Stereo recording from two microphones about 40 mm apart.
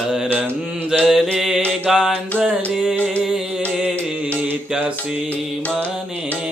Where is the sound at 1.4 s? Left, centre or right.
Centre.